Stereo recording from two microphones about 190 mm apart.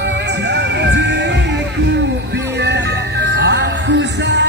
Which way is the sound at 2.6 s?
65° right (ahead or behind).